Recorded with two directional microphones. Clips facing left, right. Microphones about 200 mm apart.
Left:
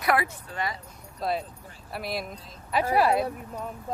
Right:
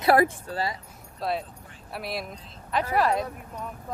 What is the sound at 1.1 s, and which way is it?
Speech, centre (ahead or behind).